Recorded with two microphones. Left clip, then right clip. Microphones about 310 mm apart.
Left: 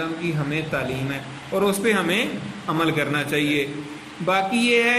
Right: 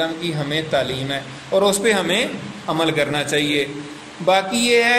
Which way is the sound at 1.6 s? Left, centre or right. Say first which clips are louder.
Right 3 dB; centre.